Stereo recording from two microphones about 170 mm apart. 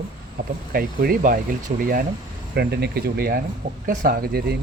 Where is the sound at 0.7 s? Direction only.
60° right (ahead or behind).